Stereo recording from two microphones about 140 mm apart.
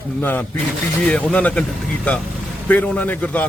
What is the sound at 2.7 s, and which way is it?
Speech, 10° left (ahead or behind).